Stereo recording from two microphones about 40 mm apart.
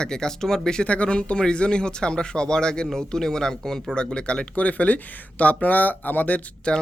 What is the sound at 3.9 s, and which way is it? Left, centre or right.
Speech, left.